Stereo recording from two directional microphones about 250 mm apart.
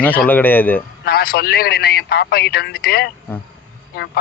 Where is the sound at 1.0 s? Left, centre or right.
Left.